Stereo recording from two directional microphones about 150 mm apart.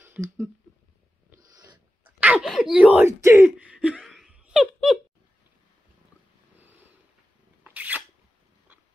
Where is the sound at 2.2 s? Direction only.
10° right (ahead or behind).